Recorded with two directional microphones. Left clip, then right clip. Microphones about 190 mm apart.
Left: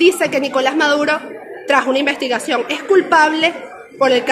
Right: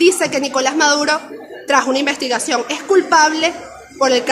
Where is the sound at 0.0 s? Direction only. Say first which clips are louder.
Left 1 dB; 5° right (ahead or behind).